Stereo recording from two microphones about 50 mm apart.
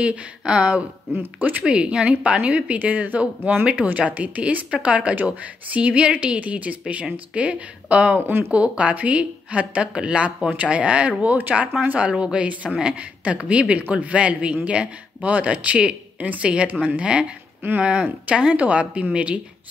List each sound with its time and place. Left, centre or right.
0.0 s speech: right
1.1 s speech: right
1.6 s speech: right
12.1 s speech: centre